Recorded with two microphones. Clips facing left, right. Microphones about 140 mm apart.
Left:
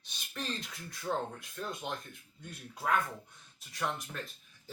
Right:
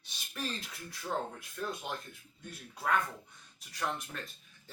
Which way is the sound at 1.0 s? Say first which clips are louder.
Left 1 dB; centre (ahead or behind).